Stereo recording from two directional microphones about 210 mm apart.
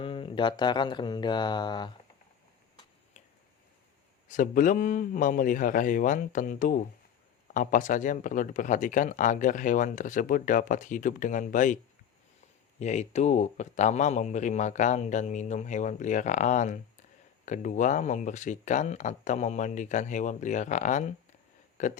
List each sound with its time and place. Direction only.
0.0 s speech: 25° left (ahead or behind)
4.3 s speech: 40° left (ahead or behind)
12.8 s speech: 35° left (ahead or behind)